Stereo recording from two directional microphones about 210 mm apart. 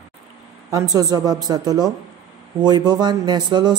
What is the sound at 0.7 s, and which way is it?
A woman's voice, 15° right (ahead or behind).